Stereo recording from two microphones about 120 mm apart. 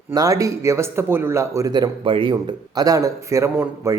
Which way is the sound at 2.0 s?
45° right (ahead or behind).